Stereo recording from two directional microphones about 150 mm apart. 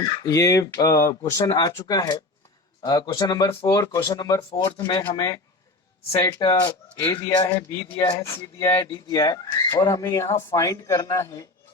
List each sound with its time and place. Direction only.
0.0 s speech: 25° left (ahead or behind)